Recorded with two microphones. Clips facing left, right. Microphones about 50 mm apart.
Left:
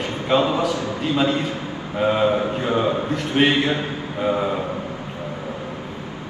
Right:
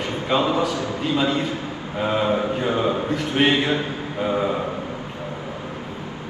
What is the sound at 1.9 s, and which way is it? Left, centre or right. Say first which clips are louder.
A man's voice: left 3 dB; centre.